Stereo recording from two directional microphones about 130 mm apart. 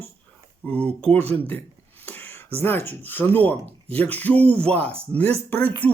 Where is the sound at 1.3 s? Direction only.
15° left (ahead or behind).